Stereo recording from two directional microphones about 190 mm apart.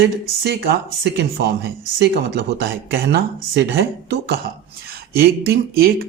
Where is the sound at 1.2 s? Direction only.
60° right (ahead or behind).